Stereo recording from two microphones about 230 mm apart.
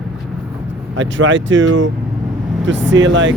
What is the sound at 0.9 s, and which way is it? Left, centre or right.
Speech, right.